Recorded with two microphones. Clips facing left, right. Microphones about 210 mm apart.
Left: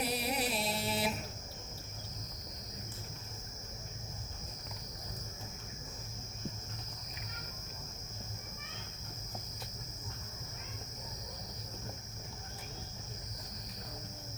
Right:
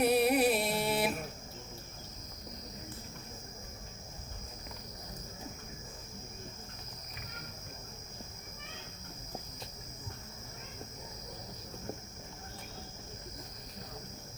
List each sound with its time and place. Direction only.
0.0 s music: 55° right (ahead or behind)